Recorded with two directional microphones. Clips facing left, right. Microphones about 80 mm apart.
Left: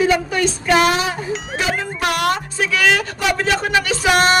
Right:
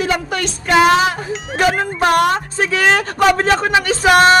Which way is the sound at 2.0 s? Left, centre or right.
Right.